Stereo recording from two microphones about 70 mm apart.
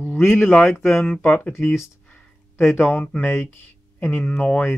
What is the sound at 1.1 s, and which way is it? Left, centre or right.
Speech, centre.